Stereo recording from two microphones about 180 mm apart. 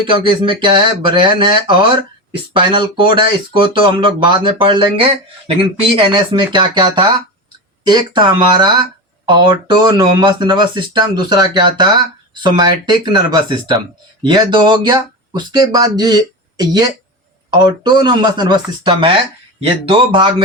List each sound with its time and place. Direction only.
0.0 s speech: 25° right (ahead or behind)